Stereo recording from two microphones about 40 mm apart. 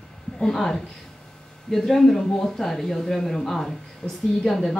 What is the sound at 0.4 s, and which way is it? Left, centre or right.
Speech, centre.